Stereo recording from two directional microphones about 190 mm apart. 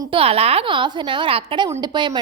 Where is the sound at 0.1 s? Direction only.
30° right (ahead or behind).